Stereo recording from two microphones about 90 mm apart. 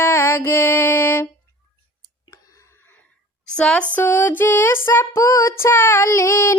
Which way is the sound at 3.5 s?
10° left (ahead or behind).